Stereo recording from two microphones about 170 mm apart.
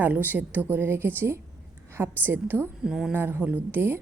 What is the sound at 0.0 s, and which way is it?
A woman's voice, 10° right (ahead or behind).